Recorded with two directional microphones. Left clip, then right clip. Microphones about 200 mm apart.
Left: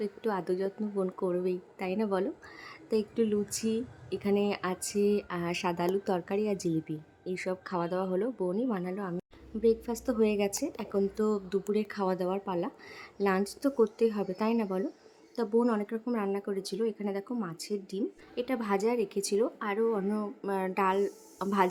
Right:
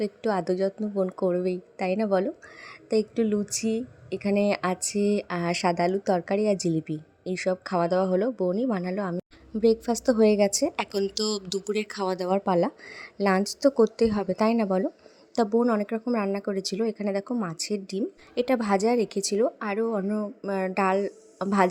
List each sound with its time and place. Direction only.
0.0 s a woman's voice: 20° right (ahead or behind)
10.8 s a woman's voice: 40° right (ahead or behind); by 21.7 s 20° right (ahead or behind)